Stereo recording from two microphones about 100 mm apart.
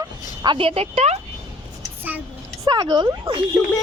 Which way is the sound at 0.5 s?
80° right.